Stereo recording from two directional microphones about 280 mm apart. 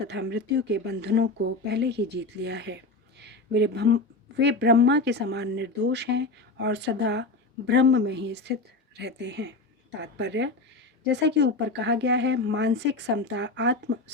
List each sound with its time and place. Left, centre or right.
0.1 s speech: right